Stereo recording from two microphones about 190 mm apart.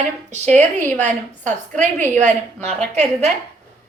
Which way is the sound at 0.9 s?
40° right (ahead or behind).